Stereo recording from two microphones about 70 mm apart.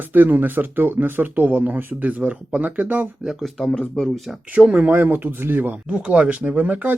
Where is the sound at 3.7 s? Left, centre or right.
Centre.